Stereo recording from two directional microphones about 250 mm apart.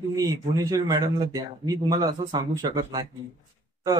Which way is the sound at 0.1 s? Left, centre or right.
Centre.